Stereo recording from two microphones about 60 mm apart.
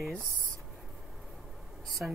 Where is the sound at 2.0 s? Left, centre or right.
Centre.